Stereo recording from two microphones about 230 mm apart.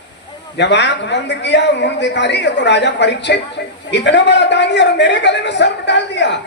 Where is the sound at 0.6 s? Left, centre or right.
Left.